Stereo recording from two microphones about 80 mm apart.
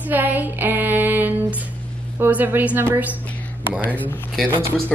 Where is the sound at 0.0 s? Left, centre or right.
Right.